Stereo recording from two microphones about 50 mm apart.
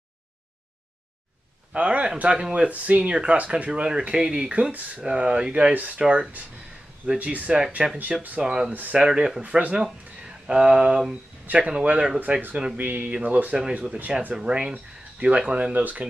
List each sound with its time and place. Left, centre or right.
1.7 s a man's voice: right
4.7 s speech: right
5.1 s speech: centre
9.4 s speech: right
10.2 s a sound: centre
11.4 s speech: right
14.3 s speech: centre
15.7 s speech: right